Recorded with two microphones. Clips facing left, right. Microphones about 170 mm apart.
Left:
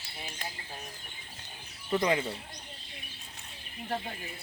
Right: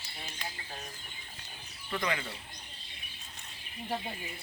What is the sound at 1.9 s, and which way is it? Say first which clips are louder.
Speech: left 7 dB; 25° left (ahead or behind).